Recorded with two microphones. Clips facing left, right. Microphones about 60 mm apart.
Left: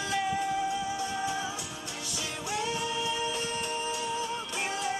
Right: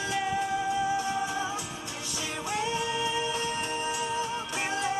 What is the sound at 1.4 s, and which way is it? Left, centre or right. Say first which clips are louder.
Music: right 3 dB; right.